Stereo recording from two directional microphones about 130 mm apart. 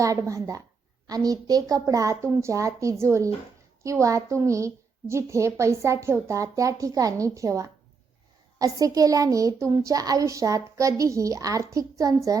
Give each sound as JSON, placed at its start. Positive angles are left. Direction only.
{"t": 0.0, "sound": "a woman's voice", "side_deg": -25}